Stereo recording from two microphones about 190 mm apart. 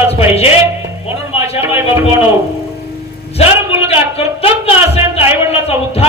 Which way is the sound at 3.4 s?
30° left (ahead or behind).